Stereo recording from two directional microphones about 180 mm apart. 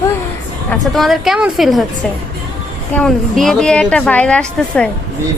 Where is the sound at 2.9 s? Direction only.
5° left (ahead or behind).